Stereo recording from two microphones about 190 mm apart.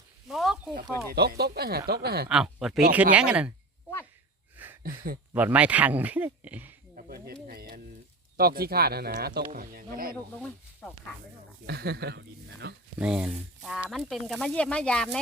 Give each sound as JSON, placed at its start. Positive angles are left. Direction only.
{"t": 0.3, "sound": "a sound", "side_deg": 0}
{"t": 1.1, "sound": "speech", "side_deg": -55}
{"t": 2.3, "sound": "speech", "side_deg": -5}
{"t": 4.5, "sound": "a sound", "side_deg": -10}
{"t": 4.8, "sound": "speech", "side_deg": -50}
{"t": 5.3, "sound": "speech", "side_deg": -10}
{"t": 6.9, "sound": "speech", "side_deg": -50}
{"t": 7.4, "sound": "a sound", "side_deg": -50}
{"t": 8.4, "sound": "speech", "side_deg": -55}
{"t": 10.3, "sound": "speech", "side_deg": 10}
{"t": 11.6, "sound": "speech", "side_deg": -55}
{"t": 13.0, "sound": "speech", "side_deg": -5}